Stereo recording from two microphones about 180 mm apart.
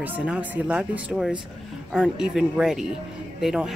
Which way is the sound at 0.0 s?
5° right (ahead or behind).